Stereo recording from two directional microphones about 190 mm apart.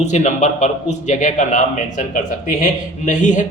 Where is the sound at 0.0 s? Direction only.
40° left (ahead or behind).